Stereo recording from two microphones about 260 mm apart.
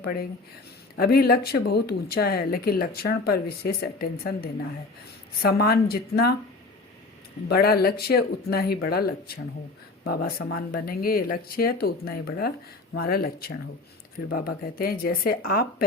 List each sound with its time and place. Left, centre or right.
0.9 s speech: left
7.4 s speech: left